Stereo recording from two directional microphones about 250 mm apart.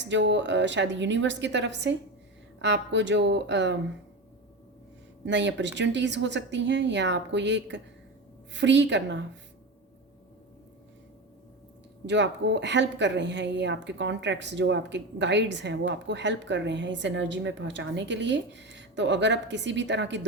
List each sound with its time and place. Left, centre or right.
0.0 s speech: right
5.2 s speech: right
12.0 s speech: right